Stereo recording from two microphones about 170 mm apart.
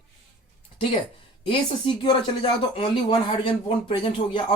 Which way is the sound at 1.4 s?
30° left (ahead or behind).